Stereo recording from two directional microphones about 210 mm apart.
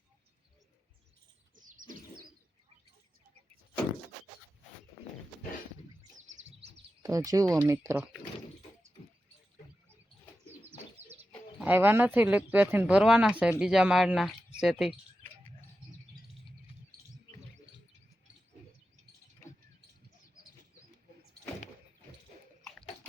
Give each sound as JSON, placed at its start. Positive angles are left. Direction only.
{"t": 1.6, "sound": "bird", "side_deg": -40}
{"t": 7.0, "sound": "speech", "side_deg": -15}
{"t": 10.6, "sound": "bird", "side_deg": -10}
{"t": 11.6, "sound": "speech", "side_deg": -10}